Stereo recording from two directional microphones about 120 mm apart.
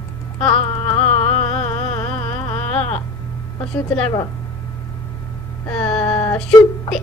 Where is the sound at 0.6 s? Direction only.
65° left (ahead or behind).